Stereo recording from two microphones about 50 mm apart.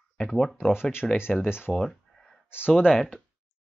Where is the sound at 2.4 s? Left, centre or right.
Left.